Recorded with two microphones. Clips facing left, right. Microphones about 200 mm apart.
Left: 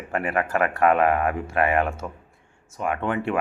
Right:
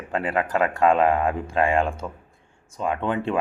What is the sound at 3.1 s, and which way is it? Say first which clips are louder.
Speech: even; 20° right (ahead or behind).